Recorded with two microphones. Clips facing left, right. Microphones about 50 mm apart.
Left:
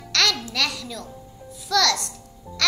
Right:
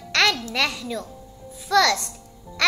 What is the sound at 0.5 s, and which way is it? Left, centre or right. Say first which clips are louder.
A child's voice: right 2 dB; right.